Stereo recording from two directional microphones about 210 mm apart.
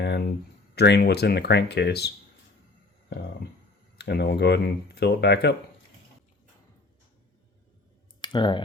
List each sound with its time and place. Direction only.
0.0 s speech: 50° left (ahead or behind)
3.1 s speech: 50° left (ahead or behind)
8.2 s speech: 20° left (ahead or behind)